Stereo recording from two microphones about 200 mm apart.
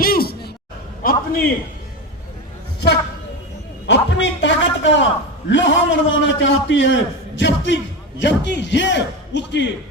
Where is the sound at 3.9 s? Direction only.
65° left (ahead or behind).